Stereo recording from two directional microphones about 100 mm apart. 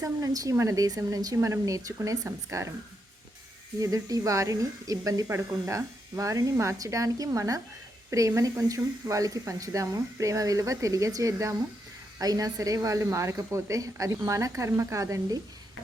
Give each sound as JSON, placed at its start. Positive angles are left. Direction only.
{"t": 0.0, "sound": "speech", "side_deg": -35}
{"t": 3.8, "sound": "speech", "side_deg": -35}